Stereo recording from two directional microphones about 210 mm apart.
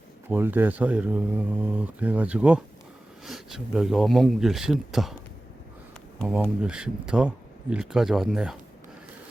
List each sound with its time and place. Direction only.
0.3 s speech: 10° right (ahead or behind)
6.1 s speech: 5° right (ahead or behind)